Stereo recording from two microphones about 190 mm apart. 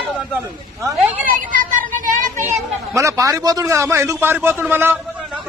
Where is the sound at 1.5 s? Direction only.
45° right (ahead or behind).